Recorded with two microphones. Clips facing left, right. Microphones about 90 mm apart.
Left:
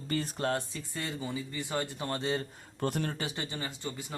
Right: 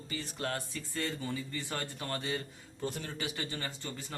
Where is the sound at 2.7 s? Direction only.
60° left (ahead or behind).